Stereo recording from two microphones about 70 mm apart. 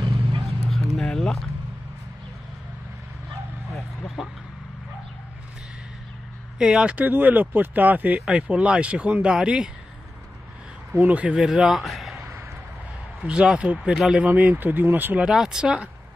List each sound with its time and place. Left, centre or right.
0.7 s vehicle: centre
4.2 s vehicle: centre
6.6 s speech: centre
10.9 s speech: right
11.3 s a man's voice: centre
13.2 s speech: centre
14.2 s speech: right
15.2 s speech: centre